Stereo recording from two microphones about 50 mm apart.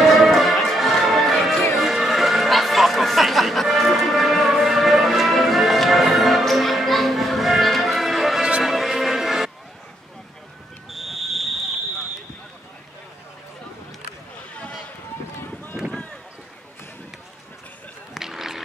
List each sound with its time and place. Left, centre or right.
0.1 s music: centre
8.4 s music: right
8.6 s music: centre
10.9 s fire alarm: centre
14.5 s a sound: left
15.8 s boat: centre
18.1 s a sound: centre